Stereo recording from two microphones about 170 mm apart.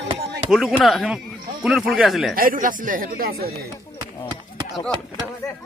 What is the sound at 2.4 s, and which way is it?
Speech, 55° right (ahead or behind).